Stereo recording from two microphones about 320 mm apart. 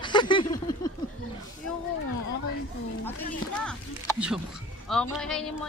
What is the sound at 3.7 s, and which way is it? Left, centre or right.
Speech, centre.